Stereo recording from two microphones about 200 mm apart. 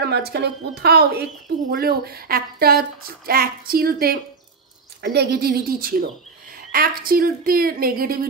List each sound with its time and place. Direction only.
0.0 s a woman's voice: 55° right (ahead or behind)